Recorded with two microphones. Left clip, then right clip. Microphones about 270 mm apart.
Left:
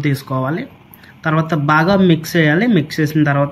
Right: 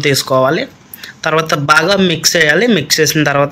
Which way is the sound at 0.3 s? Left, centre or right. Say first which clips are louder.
Right 10 dB; right.